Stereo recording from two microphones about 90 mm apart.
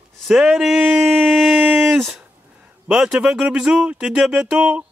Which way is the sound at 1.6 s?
20° right (ahead or behind).